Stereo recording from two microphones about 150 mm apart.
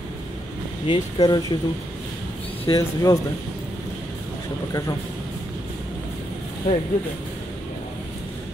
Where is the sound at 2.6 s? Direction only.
20° left (ahead or behind).